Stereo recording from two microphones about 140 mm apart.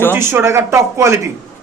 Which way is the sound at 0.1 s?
15° right (ahead or behind).